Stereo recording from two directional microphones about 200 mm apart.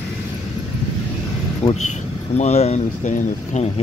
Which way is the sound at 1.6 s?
30° left (ahead or behind).